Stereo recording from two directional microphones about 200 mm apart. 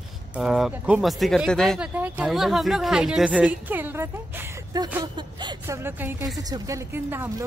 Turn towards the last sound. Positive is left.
turn(degrees=-10)  # may be behind; listen again after turning